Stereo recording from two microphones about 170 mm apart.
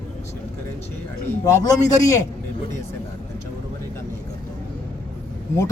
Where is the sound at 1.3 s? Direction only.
20° left (ahead or behind).